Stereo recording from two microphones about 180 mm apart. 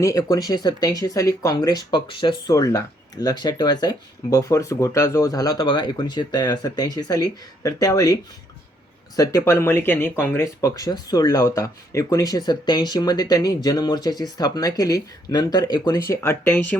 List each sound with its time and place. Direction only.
0.0 s speech: 20° left (ahead or behind)